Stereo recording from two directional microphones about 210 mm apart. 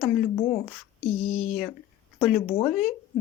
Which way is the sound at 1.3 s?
35° left (ahead or behind).